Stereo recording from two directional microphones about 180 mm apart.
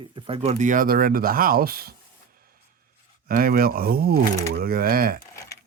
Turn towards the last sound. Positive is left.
turn(degrees=-55)  # may be behind; listen again after turning